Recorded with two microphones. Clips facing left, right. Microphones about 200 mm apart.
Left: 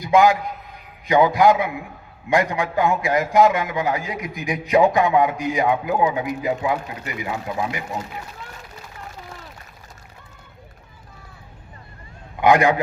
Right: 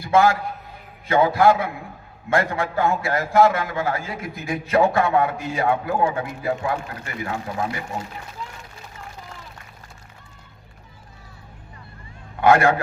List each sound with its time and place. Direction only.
0.0 s a man's voice: 15° left (ahead or behind)
12.4 s a man's voice: 15° left (ahead or behind)